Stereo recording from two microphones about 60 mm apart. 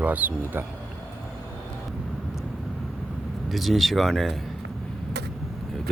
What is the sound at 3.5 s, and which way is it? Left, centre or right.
Speech, centre.